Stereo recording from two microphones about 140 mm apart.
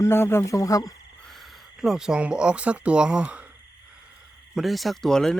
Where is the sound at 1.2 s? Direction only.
Centre (ahead or behind).